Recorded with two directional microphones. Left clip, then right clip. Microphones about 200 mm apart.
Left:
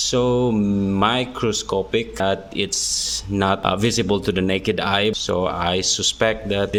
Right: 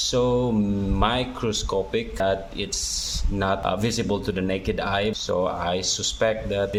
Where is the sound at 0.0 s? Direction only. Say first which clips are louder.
Left 3 dB; 30° left (ahead or behind).